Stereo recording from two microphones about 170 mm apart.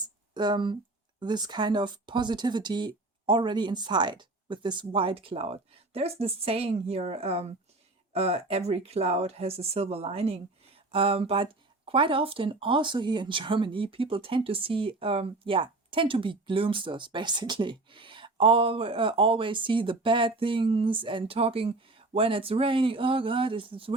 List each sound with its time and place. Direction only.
0.3 s speech: 25° right (ahead or behind)